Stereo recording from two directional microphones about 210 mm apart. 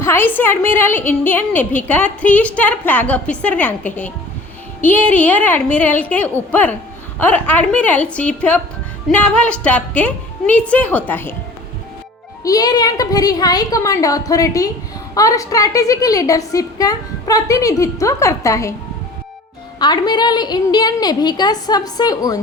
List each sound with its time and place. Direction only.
0.0 s a woman's voice: 10° left (ahead or behind)
12.4 s a woman's voice: 15° left (ahead or behind)
19.8 s a woman's voice: 20° left (ahead or behind)